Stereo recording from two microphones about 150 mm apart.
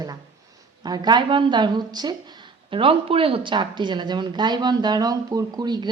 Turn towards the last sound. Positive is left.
turn(degrees=-30)  # may be behind; listen again after turning